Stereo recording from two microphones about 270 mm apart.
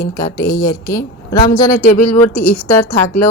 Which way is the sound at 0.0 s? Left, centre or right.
Centre.